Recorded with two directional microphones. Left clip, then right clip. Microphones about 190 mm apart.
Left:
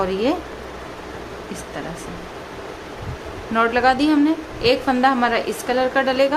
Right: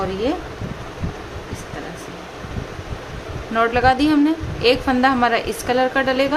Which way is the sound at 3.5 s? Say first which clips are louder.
Right 1 dB; centre (ahead or behind).